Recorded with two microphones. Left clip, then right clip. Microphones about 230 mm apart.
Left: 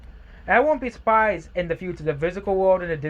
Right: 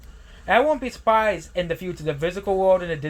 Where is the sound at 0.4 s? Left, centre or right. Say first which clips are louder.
Even; centre.